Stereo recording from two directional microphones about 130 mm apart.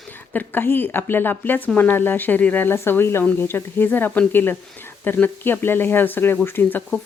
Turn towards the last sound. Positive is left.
turn(degrees=15)  # may be behind; listen again after turning